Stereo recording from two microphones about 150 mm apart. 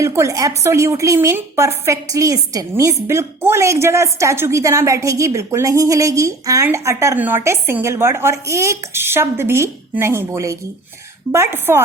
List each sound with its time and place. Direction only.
0.0 s a woman's voice: 20° right (ahead or behind)